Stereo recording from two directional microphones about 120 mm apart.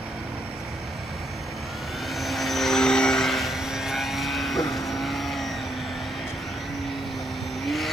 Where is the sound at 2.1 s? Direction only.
Centre (ahead or behind).